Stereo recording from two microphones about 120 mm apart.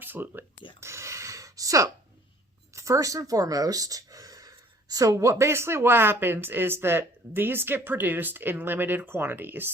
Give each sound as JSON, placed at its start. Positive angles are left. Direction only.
{"t": 0.0, "sound": "speech", "side_deg": -15}
{"t": 0.8, "sound": "a sound", "side_deg": -25}
{"t": 2.7, "sound": "speech", "side_deg": -25}